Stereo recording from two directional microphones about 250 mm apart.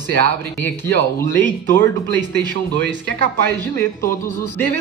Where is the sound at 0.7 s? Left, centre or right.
Centre.